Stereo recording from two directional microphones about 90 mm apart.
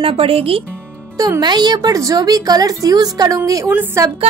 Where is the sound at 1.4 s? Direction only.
55° right (ahead or behind).